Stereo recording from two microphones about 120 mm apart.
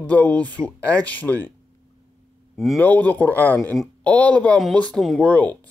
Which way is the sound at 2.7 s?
15° left (ahead or behind).